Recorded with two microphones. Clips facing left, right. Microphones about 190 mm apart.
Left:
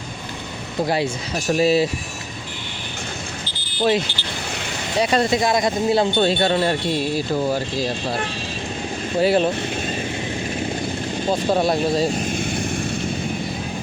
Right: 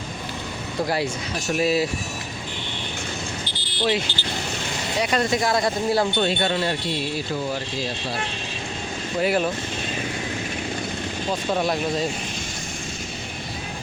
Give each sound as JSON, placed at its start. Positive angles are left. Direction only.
{"t": 1.5, "sound": "speech", "side_deg": 30}
{"t": 4.9, "sound": "speech", "side_deg": 25}
{"t": 6.2, "sound": "speech", "side_deg": 35}
{"t": 9.2, "sound": "speech", "side_deg": 30}
{"t": 11.3, "sound": "speech", "side_deg": 35}